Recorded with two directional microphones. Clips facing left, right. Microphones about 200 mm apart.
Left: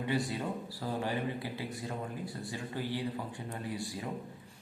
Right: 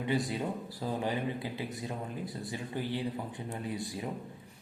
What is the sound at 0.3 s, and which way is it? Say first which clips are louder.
Speech: right 2 dB; 20° right (ahead or behind).